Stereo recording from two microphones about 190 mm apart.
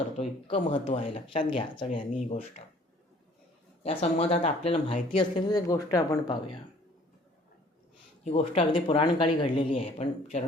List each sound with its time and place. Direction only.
0.2 s speech: 30° left (ahead or behind)
3.8 s speech: 30° left (ahead or behind)
8.2 s speech: 30° left (ahead or behind)